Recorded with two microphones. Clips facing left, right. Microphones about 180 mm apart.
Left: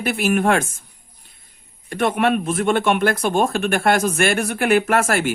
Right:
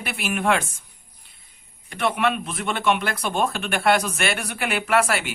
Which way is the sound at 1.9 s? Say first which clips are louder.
Left 4 dB; 50° left (ahead or behind).